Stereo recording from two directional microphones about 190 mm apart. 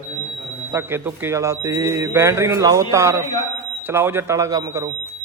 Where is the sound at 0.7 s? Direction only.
10° right (ahead or behind).